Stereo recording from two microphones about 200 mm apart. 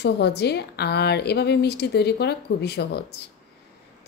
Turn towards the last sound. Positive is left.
turn(degrees=55)  # may be behind; listen again after turning